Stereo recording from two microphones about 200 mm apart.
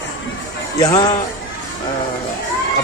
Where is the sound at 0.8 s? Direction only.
20° left (ahead or behind).